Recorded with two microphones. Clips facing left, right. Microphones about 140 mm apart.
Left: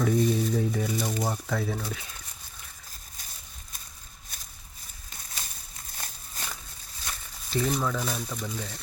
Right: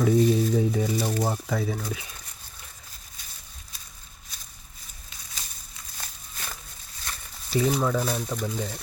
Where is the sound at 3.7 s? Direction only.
50° left (ahead or behind).